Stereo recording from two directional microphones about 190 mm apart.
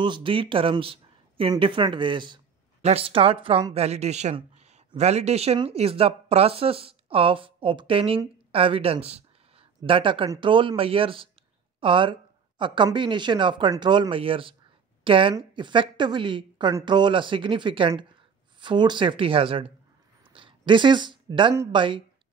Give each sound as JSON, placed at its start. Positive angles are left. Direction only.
{"t": 0.0, "sound": "a woman's voice", "side_deg": -25}